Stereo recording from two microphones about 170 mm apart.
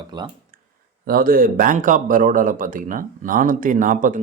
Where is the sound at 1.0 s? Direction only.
60° right (ahead or behind).